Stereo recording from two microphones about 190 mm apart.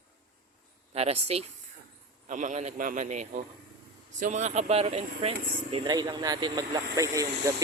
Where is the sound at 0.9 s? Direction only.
30° right (ahead or behind).